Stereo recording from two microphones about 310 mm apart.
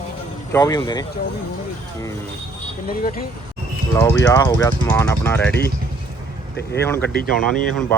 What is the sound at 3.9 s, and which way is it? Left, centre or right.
Speech, centre.